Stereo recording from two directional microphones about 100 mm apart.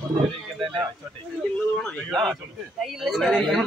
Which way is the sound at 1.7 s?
5° left (ahead or behind).